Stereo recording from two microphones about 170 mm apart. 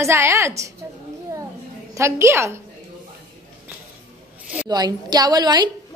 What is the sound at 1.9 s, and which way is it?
Speech, 15° right (ahead or behind).